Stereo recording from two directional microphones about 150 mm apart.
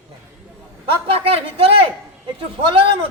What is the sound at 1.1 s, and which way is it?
A man's voice, 40° right (ahead or behind).